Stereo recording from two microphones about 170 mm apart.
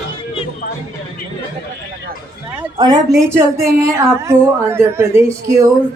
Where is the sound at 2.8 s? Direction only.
20° right (ahead or behind).